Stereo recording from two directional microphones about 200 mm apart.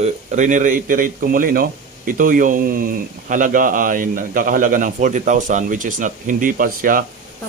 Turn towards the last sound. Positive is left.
turn(degrees=-45)  # may be behind; listen again after turning